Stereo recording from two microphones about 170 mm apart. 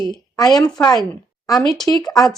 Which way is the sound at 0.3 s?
20° left (ahead or behind).